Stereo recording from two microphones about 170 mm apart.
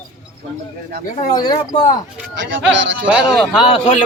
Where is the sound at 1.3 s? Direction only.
25° left (ahead or behind).